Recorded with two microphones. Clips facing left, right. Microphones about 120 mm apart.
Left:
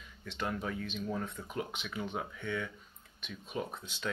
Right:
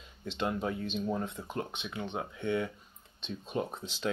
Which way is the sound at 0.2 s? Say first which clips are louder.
Right 4 dB; 25° right (ahead or behind).